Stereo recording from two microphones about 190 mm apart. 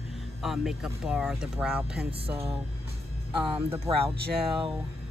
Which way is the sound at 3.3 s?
25° right (ahead or behind).